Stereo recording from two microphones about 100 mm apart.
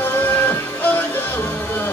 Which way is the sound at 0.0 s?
20° left (ahead or behind).